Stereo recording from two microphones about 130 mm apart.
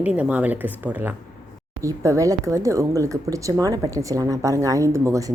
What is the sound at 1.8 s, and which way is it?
Speech, 25° right (ahead or behind).